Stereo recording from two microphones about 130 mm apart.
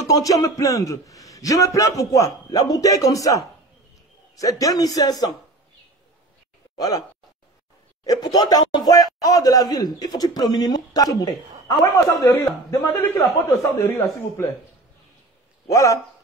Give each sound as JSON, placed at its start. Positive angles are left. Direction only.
{"t": 0.0, "sound": "a man's voice", "side_deg": 25}
{"t": 6.8, "sound": "a man's voice", "side_deg": 30}
{"t": 15.7, "sound": "a man's voice", "side_deg": 25}